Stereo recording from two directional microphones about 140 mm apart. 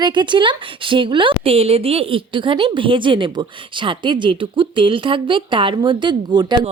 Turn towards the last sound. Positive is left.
turn(degrees=-35)  # may be behind; listen again after turning